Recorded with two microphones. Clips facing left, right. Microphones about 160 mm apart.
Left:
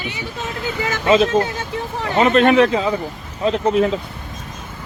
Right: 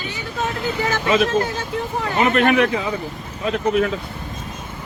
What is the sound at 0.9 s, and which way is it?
Speech, 25° left (ahead or behind).